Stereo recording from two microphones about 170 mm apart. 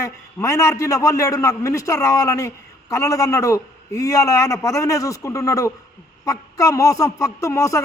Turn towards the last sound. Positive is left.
turn(degrees=20)  # may be behind; listen again after turning